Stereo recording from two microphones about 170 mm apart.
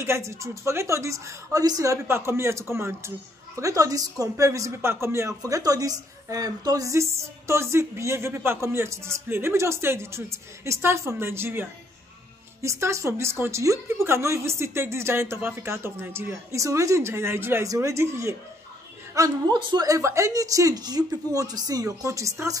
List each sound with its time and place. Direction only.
0.0 s a woman's voice: 15° right (ahead or behind)